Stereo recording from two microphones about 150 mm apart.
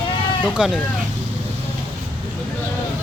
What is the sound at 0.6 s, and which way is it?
Speech, 5° right (ahead or behind).